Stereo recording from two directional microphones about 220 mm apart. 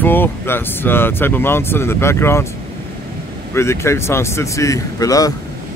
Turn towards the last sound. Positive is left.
turn(degrees=15)  # may be behind; listen again after turning